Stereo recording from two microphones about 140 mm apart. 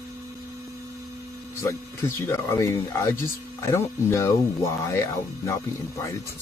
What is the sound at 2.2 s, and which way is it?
Speech, 20° left (ahead or behind).